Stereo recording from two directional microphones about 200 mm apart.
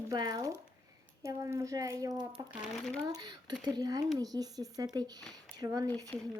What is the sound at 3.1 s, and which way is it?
Speech, 20° right (ahead or behind).